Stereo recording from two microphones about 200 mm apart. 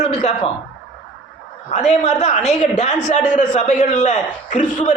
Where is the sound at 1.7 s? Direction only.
35° left (ahead or behind).